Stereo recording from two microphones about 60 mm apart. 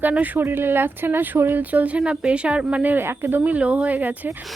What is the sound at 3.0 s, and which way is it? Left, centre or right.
Speech, right.